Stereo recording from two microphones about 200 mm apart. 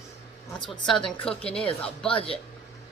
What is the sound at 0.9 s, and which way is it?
A woman's voice, 5° left (ahead or behind).